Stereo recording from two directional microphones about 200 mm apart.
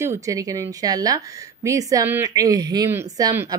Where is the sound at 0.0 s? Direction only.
15° right (ahead or behind).